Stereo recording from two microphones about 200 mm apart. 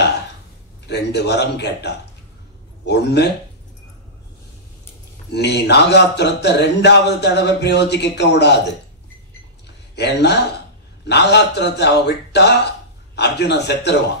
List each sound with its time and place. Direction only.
0.8 s speech: 60° left (ahead or behind)
5.3 s speech: 55° left (ahead or behind)
9.9 s speech: 55° left (ahead or behind)